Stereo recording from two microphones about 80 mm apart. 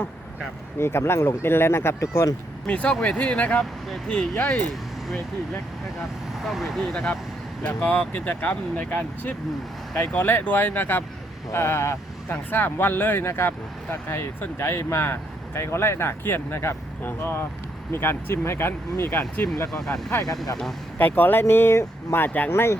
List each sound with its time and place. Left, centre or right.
0.8 s speech: left
2.6 s speech: centre
6.4 s speech: centre
7.6 s speech: left
19.7 s speech: centre
21.0 s speech: left